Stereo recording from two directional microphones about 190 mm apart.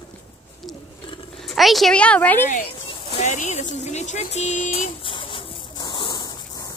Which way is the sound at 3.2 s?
40° left (ahead or behind).